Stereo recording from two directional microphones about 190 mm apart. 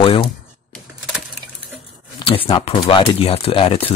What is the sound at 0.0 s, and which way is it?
Speech, 30° left (ahead or behind).